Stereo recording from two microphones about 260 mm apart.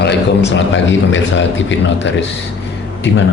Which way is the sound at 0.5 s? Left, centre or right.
Left.